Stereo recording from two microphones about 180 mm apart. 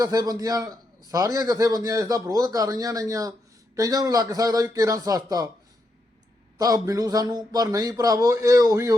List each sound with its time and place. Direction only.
0.0 s a man's voice: 20° right (ahead or behind)
6.6 s a man's voice: 20° right (ahead or behind)